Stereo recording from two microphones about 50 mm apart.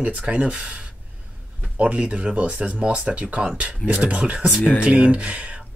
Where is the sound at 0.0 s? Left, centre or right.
Right.